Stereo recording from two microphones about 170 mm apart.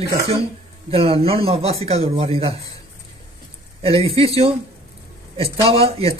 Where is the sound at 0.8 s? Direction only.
35° right (ahead or behind).